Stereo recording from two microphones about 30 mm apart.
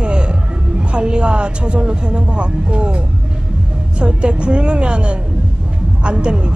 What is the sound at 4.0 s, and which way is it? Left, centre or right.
Speech, right.